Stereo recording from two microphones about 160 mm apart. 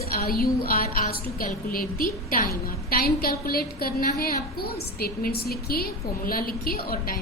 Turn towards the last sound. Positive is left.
turn(degrees=70)  # may be behind; listen again after turning